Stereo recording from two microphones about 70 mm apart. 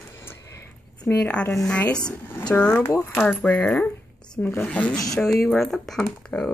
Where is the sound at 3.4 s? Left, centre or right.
Centre.